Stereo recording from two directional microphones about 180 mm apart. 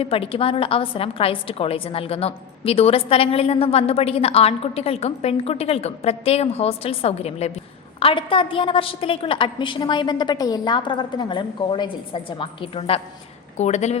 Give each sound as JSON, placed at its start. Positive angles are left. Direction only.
{"t": 0.0, "sound": "a woman's voice", "side_deg": 30}